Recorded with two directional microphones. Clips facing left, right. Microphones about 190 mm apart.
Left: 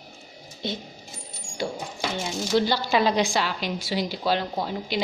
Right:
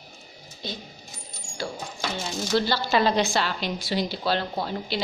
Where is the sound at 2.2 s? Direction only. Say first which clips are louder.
Left 2 dB; 15° left (ahead or behind).